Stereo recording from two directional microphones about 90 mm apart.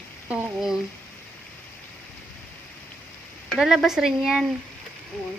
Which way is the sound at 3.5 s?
5° right (ahead or behind).